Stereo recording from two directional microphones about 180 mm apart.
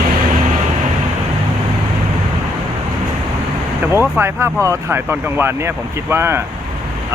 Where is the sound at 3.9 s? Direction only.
15° right (ahead or behind).